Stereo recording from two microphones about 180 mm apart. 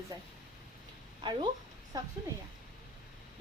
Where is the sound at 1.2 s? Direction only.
25° right (ahead or behind).